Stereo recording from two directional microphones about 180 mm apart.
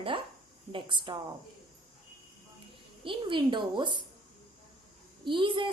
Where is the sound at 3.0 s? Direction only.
30° right (ahead or behind).